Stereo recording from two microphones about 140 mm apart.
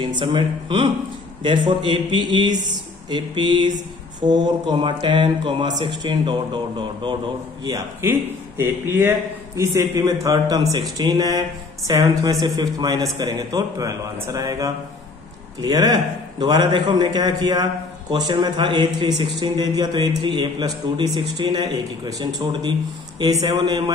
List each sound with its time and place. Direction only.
0.0 s speech: 35° right (ahead or behind)
8.0 s a man's voice: 15° right (ahead or behind)